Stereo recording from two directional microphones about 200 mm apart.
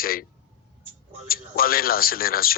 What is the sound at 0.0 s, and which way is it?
Speech, 45° left (ahead or behind).